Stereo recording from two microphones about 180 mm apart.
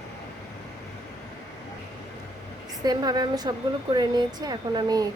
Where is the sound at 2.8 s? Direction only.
20° right (ahead or behind).